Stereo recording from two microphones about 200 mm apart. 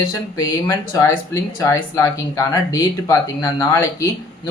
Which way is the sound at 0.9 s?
15° left (ahead or behind).